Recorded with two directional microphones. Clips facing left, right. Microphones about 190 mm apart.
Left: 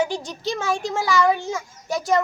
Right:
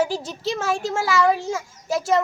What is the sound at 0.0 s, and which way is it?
A child's voice, 5° right (ahead or behind).